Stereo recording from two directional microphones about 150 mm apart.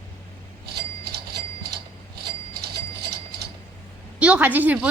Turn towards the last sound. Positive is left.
turn(degrees=-10)  # may be behind; listen again after turning